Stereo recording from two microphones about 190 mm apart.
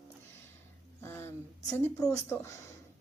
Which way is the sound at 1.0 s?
10° left (ahead or behind).